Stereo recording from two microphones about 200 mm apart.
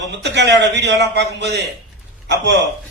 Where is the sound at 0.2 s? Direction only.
60° right (ahead or behind).